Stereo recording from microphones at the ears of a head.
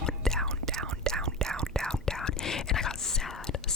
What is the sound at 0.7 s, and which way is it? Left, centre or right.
Whispering, right.